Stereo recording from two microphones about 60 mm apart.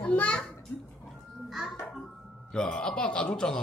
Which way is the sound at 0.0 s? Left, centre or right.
Left.